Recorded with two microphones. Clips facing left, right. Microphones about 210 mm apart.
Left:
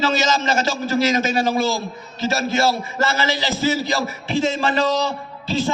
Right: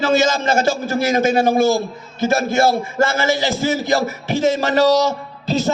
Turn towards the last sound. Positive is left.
turn(degrees=-40)  # may be behind; listen again after turning